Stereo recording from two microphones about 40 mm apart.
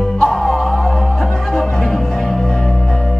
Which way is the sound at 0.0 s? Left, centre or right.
Centre.